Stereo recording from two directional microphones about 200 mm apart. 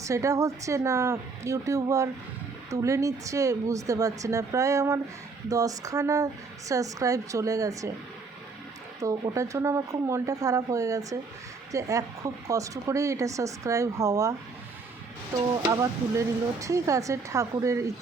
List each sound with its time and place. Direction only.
0.0 s speech: 15° right (ahead or behind)
9.0 s speech: 15° right (ahead or behind)